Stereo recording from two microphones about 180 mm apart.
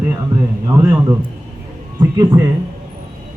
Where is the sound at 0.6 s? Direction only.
15° right (ahead or behind).